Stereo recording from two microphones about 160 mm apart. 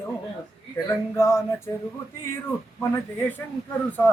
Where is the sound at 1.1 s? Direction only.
15° left (ahead or behind).